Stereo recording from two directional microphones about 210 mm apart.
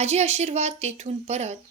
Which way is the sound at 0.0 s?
30° right (ahead or behind).